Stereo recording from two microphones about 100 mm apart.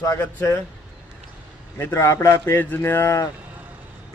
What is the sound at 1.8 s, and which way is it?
A man's voice, 25° left (ahead or behind).